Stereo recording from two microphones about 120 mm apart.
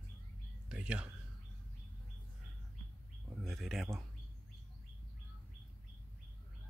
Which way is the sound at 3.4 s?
Centre (ahead or behind).